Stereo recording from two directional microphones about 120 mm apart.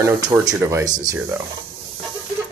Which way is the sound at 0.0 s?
25° right (ahead or behind).